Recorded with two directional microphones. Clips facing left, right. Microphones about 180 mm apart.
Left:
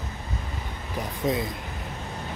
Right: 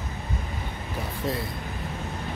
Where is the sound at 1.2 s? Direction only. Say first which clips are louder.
Left 4 dB; 20° left (ahead or behind).